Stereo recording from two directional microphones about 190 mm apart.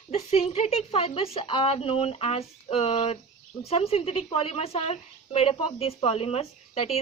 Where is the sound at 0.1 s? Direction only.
35° left (ahead or behind).